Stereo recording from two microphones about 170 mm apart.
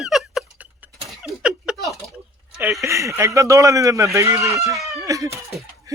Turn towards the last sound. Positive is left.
turn(degrees=-20)  # may be behind; listen again after turning